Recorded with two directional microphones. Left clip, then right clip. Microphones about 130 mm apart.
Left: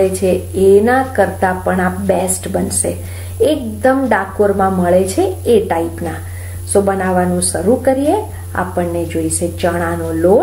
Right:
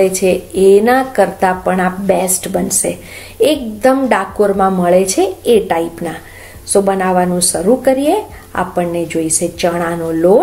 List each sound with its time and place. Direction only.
0.0 s a woman's voice: 20° right (ahead or behind)